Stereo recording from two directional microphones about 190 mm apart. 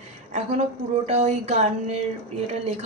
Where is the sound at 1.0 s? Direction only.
35° right (ahead or behind).